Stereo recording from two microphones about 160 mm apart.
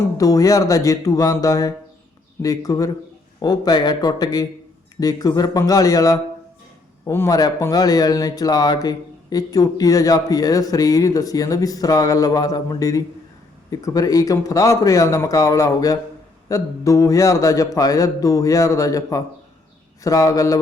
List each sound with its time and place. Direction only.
0.2 s speech: 20° left (ahead or behind)